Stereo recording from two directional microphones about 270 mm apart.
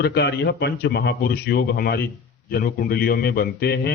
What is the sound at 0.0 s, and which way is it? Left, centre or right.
A man's voice, left.